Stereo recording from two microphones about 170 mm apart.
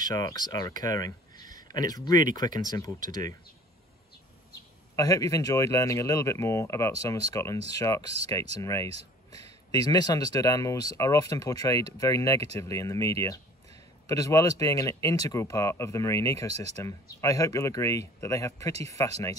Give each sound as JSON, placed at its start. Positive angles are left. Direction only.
{"t": 0.0, "sound": "speech", "side_deg": 20}
{"t": 4.9, "sound": "speech", "side_deg": 20}
{"t": 9.7, "sound": "speech", "side_deg": 25}